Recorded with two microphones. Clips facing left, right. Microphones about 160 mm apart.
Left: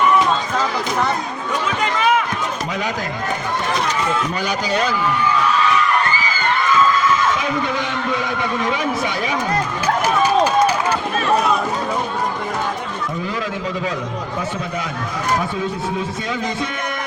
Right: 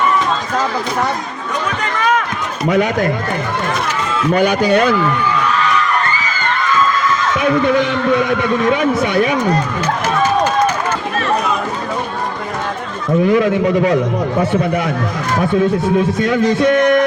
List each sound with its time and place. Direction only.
1.8 s run: 15° left (ahead or behind)
2.6 s a man's voice: 60° right (ahead or behind)
4.4 s a man's voice: 60° right (ahead or behind)
7.3 s a man's voice: 65° right (ahead or behind)
13.2 s a man's voice: 65° right (ahead or behind)
16.2 s a man's voice: 65° right (ahead or behind)